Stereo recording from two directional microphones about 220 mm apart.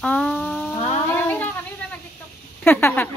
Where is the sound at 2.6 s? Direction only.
10° left (ahead or behind).